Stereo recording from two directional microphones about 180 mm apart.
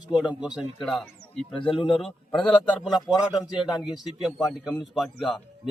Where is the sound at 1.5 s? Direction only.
30° left (ahead or behind).